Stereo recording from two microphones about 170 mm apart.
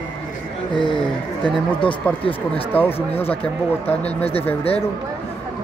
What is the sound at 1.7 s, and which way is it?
Speech, 10° left (ahead or behind).